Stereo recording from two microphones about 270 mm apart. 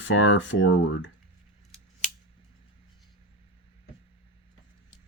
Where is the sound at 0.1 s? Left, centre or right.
Left.